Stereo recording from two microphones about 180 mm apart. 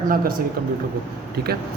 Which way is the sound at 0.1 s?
50° right (ahead or behind).